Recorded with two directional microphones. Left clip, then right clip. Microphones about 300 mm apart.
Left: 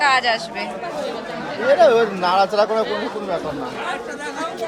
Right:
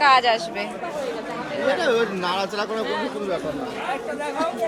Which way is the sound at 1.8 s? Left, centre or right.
Centre.